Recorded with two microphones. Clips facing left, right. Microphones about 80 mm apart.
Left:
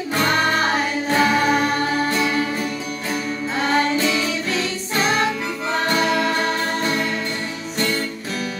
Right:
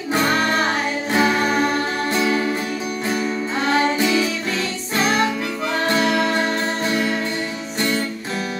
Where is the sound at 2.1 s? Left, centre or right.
Centre.